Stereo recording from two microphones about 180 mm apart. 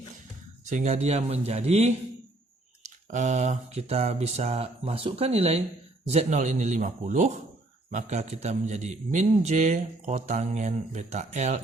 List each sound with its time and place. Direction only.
0.7 s a man's voice: 40° right (ahead or behind)
3.1 s a man's voice: 40° right (ahead or behind)